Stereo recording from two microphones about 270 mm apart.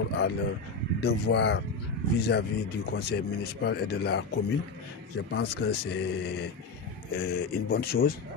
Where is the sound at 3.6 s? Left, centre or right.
Left.